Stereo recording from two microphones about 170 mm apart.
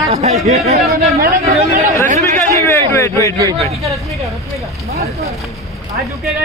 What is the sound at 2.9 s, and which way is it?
Speech, 15° left (ahead or behind).